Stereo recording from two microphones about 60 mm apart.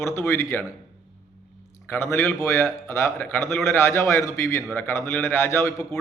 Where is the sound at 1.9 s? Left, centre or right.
Left.